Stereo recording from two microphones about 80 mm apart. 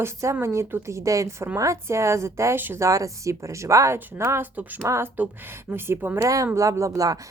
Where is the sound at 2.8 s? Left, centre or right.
Right.